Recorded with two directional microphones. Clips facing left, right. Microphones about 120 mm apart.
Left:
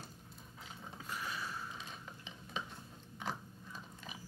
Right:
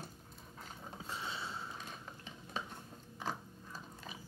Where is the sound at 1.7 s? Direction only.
45° right (ahead or behind).